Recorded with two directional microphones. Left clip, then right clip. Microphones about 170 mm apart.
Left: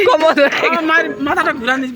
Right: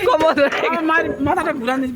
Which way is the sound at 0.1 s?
25° left (ahead or behind).